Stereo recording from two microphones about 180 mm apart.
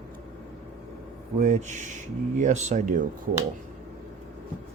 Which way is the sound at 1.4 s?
40° right (ahead or behind).